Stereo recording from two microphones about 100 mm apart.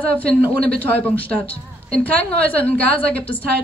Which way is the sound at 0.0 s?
15° left (ahead or behind).